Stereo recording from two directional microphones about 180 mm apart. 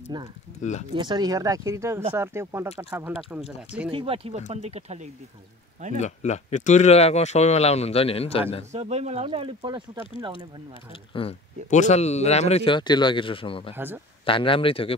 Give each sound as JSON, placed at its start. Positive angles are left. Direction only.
{"t": 0.1, "sound": "speech", "side_deg": -25}
{"t": 0.6, "sound": "speech", "side_deg": 40}
{"t": 0.9, "sound": "speech", "side_deg": -25}
{"t": 3.3, "sound": "speech", "side_deg": -5}
{"t": 3.9, "sound": "speech", "side_deg": -30}
{"t": 5.9, "sound": "speech", "side_deg": 40}
{"t": 8.7, "sound": "speech", "side_deg": -35}
{"t": 10.7, "sound": "speech", "side_deg": 30}
{"t": 13.7, "sound": "speech", "side_deg": -10}
{"t": 14.2, "sound": "speech", "side_deg": 30}